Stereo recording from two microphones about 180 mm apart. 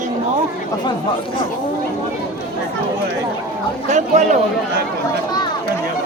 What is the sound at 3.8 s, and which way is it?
Speech, 40° right (ahead or behind).